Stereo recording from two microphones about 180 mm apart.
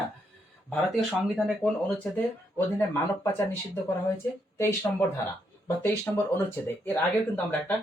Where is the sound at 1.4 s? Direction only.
Centre (ahead or behind).